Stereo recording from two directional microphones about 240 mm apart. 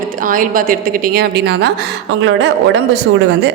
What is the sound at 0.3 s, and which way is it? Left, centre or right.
A woman's voice, right.